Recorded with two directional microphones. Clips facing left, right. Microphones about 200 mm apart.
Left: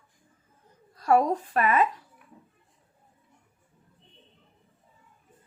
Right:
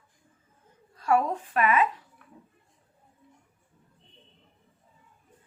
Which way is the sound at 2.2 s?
10° left (ahead or behind).